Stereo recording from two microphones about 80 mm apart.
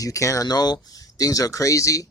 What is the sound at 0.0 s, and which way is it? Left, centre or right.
Speech, left.